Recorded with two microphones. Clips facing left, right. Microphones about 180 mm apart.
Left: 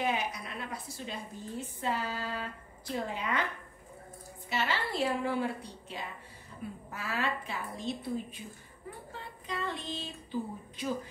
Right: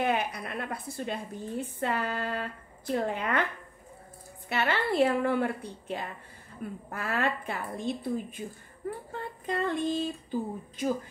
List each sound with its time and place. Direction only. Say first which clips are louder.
0.0 s a woman's voice: right 4 dB; 60° right (ahead or behind)
4.5 s a woman's voice: right 5 dB; 60° right (ahead or behind)
9.1 s child singing: right 5 dB; 55° right (ahead or behind)
10.8 s a woman's voice: right 5 dB; 45° right (ahead or behind)